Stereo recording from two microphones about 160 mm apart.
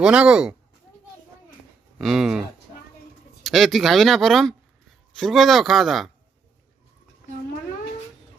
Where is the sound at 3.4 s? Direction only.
Centre (ahead or behind).